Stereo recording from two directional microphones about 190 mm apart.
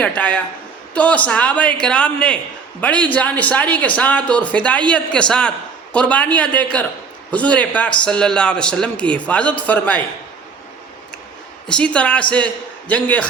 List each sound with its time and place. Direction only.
0.0 s speech: 10° left (ahead or behind)
11.7 s speech: 5° left (ahead or behind)